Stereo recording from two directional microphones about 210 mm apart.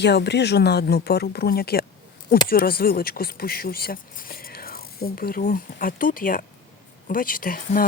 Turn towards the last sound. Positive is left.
turn(degrees=40)  # may be behind; listen again after turning